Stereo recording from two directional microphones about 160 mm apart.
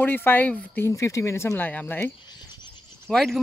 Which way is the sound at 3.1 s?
Centre (ahead or behind).